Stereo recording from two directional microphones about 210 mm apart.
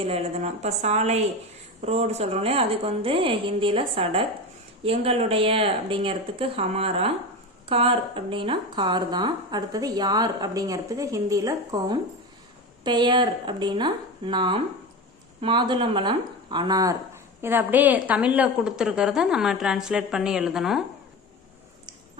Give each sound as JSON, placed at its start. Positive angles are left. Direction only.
{"t": 0.0, "sound": "a woman's voice", "side_deg": -30}